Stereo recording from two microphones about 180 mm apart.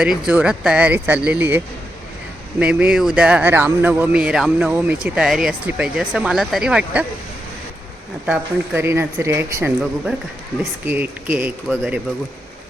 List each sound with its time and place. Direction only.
0.0 s speech: 5° right (ahead or behind)
8.3 s speech: 15° right (ahead or behind)
10.8 s speech: 10° right (ahead or behind)